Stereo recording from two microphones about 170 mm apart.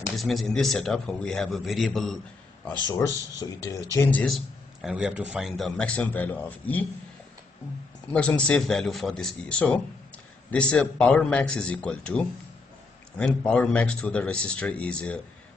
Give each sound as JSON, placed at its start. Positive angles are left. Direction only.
{"t": 0.1, "sound": "a man's voice", "side_deg": 0}
{"t": 3.3, "sound": "speech", "side_deg": 20}
{"t": 4.8, "sound": "a man's voice", "side_deg": -5}
{"t": 8.1, "sound": "a man's voice", "side_deg": 5}
{"t": 13.5, "sound": "speech", "side_deg": 5}